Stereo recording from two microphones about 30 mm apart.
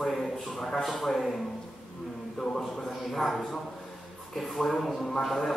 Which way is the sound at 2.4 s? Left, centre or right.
Centre.